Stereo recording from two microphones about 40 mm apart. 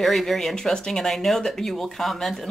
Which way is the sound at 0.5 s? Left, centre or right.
Centre.